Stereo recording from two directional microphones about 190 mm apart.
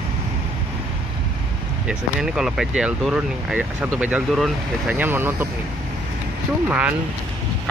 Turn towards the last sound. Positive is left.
turn(degrees=-10)  # may be behind; listen again after turning